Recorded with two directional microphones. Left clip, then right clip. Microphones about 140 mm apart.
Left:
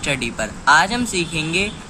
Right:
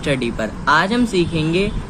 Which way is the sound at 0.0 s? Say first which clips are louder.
Right 2 dB; 45° left (ahead or behind).